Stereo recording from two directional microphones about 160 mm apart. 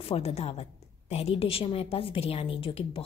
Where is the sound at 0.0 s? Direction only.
40° left (ahead or behind).